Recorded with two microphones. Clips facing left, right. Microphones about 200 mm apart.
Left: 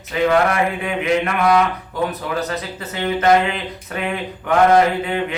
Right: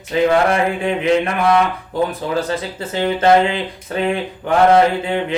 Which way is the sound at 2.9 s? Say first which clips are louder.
Right 2 dB; 30° right (ahead or behind).